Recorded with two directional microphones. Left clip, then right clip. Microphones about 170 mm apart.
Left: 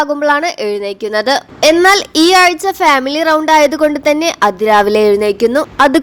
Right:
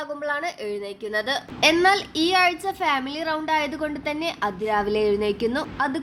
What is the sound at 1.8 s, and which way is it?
A child's voice, 50° left (ahead or behind).